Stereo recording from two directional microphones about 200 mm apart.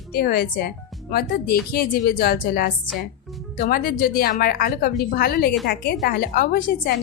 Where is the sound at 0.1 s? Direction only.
50° left (ahead or behind).